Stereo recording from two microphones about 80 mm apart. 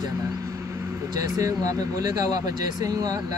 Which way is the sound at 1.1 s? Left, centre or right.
Right.